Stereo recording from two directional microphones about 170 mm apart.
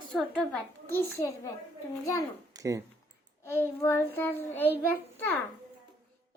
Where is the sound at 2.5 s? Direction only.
20° right (ahead or behind).